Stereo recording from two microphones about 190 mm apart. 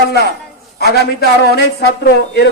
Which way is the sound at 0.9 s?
55° left (ahead or behind).